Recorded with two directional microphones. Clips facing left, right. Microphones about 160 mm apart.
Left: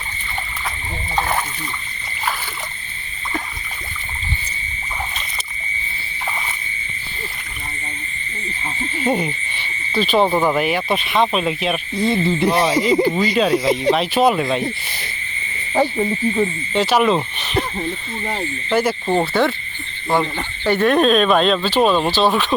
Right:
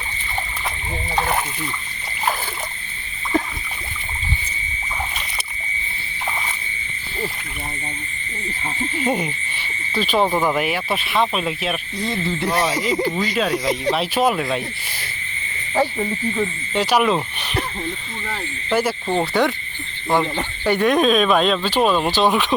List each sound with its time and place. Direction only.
9.0 s speech: 10° right (ahead or behind)
10.2 s speech: 5° left (ahead or behind)
10.4 s speech: 5° right (ahead or behind)
13.9 s speech: 5° right (ahead or behind)
15.7 s speech: 15° left (ahead or behind)
16.7 s speech: 10° right (ahead or behind)
18.7 s speech: 5° right (ahead or behind)
19.0 s speech: 10° left (ahead or behind)
19.3 s speech: 15° right (ahead or behind)
22.1 s speech: 15° right (ahead or behind)